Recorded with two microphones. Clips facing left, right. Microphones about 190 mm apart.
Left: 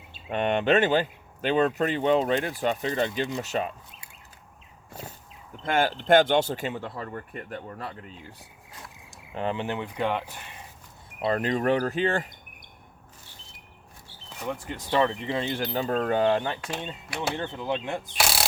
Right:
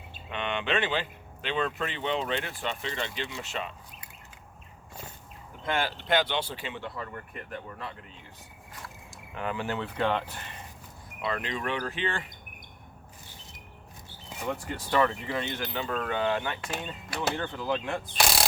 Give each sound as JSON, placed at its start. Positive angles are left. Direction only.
{"t": 0.3, "sound": "speech", "side_deg": 45}
{"t": 5.6, "sound": "speech", "side_deg": 45}
{"t": 9.3, "sound": "speech", "side_deg": 30}
{"t": 11.2, "sound": "speech", "side_deg": 40}
{"t": 14.8, "sound": "speech", "side_deg": 20}
{"t": 17.3, "sound": "speech", "side_deg": 25}
{"t": 18.2, "sound": "a sound", "side_deg": 5}